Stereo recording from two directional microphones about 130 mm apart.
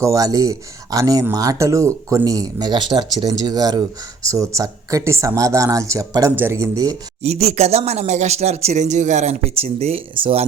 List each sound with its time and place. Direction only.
0.0 s speech: 25° right (ahead or behind)
7.2 s speech: 55° right (ahead or behind)